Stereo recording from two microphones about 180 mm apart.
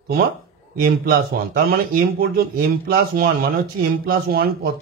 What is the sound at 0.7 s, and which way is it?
A man's voice, 55° right (ahead or behind).